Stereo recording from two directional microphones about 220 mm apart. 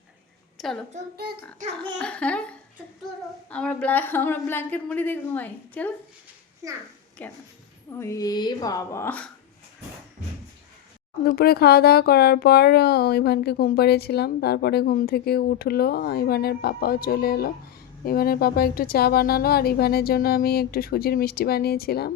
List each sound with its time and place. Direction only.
0.6 s a woman's voice: centre (ahead or behind)
1.5 s speech: 30° right (ahead or behind)
2.0 s a woman's voice: 5° left (ahead or behind)
7.2 s a woman's voice: 10° left (ahead or behind)
11.3 s speech: 45° left (ahead or behind)